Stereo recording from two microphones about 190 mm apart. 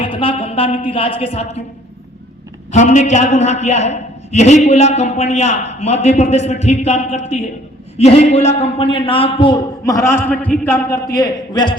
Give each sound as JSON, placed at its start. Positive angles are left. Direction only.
{"t": 0.0, "sound": "speech", "side_deg": 30}
{"t": 2.7, "sound": "a man's voice", "side_deg": 40}